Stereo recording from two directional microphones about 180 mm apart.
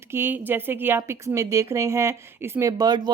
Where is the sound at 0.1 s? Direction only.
10° right (ahead or behind).